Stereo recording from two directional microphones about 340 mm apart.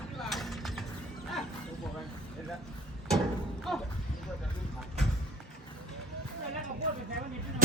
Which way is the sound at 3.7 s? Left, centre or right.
Centre.